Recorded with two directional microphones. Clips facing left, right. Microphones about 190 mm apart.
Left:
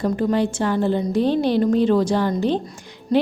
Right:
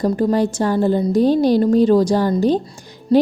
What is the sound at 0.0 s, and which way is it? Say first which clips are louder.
A woman's voice: right 3 dB; 35° right (ahead or behind).